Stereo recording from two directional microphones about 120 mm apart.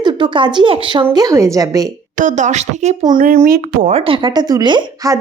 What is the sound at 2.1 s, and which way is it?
Speech, 90° right.